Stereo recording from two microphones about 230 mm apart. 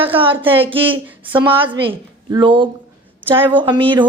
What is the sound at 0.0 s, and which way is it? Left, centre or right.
Speech, right.